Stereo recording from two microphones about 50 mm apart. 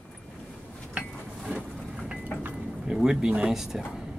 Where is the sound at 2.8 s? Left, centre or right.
Centre.